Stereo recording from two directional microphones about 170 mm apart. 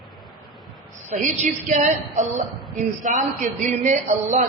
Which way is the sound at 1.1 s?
45° right (ahead or behind).